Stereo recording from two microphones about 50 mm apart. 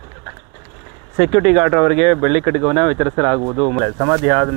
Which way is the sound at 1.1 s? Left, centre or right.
Centre.